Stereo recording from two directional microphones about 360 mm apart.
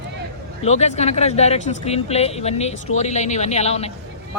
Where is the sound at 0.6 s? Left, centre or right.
Centre.